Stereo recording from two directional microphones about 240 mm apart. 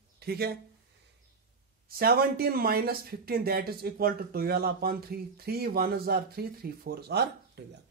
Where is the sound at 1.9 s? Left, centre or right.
Right.